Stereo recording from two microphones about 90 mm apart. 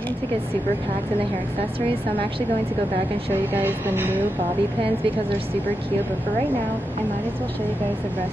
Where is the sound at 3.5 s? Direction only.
25° right (ahead or behind).